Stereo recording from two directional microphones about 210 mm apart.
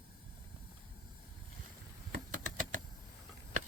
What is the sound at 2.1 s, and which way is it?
Typing, 40° right (ahead or behind).